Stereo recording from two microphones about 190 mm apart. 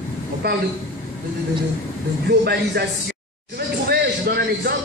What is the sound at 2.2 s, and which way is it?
Speech, 55° right (ahead or behind).